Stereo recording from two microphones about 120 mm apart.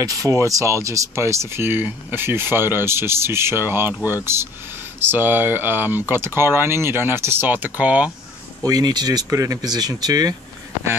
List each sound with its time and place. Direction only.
0.0 s speech: 30° right (ahead or behind); by 8.1 s 10° right (ahead or behind)
8.6 s speech: 35° right (ahead or behind)